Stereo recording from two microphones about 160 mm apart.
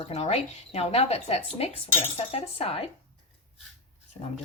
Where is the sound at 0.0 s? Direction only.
40° left (ahead or behind).